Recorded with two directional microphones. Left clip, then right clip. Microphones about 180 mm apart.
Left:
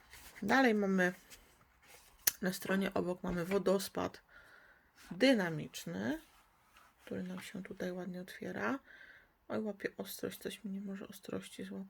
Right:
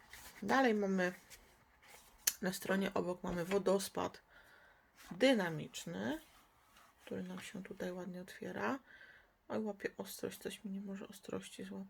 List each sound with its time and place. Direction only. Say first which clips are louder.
0.4 s speech: left 2 dB; 20° left (ahead or behind)
2.2 s speech: left 1 dB; 20° left (ahead or behind)